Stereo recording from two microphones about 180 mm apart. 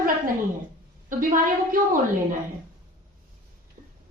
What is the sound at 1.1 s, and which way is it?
Speech, 50° right (ahead or behind).